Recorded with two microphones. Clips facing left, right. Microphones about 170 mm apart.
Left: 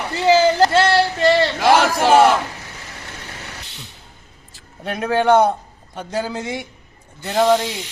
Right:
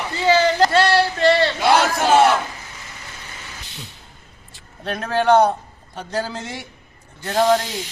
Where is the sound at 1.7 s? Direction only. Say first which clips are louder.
Left 3 dB; 10° left (ahead or behind).